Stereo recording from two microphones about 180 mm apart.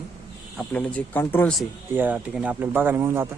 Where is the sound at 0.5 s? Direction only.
10° left (ahead or behind).